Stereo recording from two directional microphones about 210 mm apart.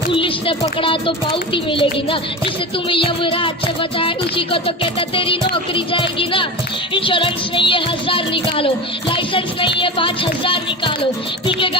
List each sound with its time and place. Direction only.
0.1 s speech: 25° left (ahead or behind)